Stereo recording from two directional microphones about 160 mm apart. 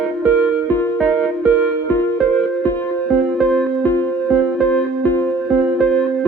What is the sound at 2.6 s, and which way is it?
Music, 15° left (ahead or behind).